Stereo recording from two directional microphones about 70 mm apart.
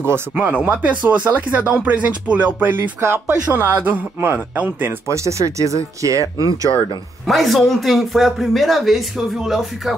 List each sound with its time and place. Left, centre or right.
0.3 s speech: right
3.6 s speech: right
5.0 s speech: right
7.2 s speech: centre